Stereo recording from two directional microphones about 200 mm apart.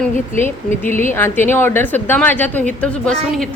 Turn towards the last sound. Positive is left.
turn(degrees=0)  # may be behind; listen again after turning